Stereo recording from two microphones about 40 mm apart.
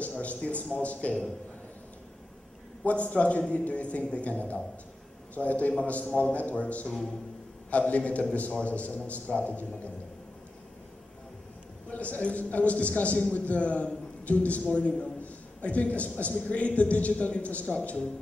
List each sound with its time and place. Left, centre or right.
0.0 s a man's voice: left
2.8 s a man's voice: left
11.9 s a man's voice: left